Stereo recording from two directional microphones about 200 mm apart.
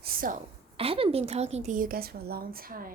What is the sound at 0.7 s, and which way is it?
A woman's voice, 30° right (ahead or behind).